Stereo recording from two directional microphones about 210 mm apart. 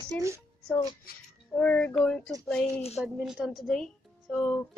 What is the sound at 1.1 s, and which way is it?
Speech, 45° left (ahead or behind).